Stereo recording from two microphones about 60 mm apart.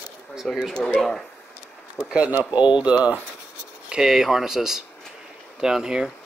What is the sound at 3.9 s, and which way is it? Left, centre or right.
Speech, centre.